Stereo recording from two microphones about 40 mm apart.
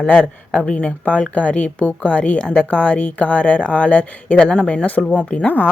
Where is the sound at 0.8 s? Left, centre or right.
Left.